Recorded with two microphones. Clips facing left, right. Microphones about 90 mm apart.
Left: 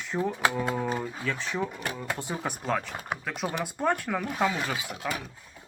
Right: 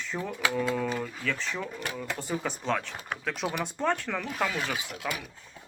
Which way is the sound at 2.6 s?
5° left (ahead or behind).